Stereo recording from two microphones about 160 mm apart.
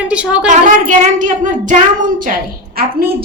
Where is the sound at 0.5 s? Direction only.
55° right (ahead or behind).